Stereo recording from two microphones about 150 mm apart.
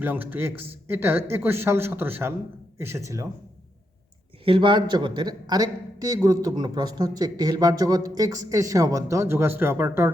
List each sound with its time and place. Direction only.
0.0 s speech: 10° right (ahead or behind)
4.4 s speech: 35° right (ahead or behind); by 10.1 s 15° right (ahead or behind)